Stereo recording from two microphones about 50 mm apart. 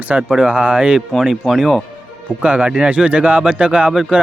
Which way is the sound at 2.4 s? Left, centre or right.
Centre.